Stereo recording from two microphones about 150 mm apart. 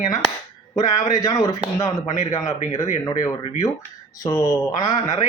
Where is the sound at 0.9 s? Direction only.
25° left (ahead or behind).